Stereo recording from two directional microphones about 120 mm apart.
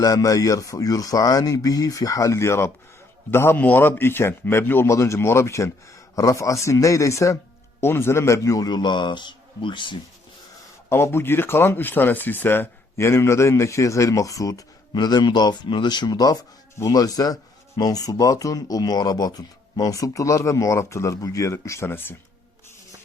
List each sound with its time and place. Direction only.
0.0 s a man's voice: 30° left (ahead or behind)
10.8 s speech: 20° left (ahead or behind)